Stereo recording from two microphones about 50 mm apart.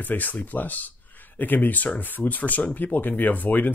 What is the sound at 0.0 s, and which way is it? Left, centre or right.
Speech, left.